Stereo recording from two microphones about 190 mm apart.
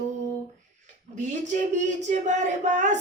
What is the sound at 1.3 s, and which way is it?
Speech, 40° right (ahead or behind).